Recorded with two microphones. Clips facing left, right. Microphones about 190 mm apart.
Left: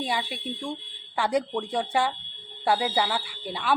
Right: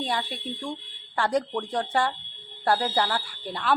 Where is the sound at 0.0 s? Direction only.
5° left (ahead or behind).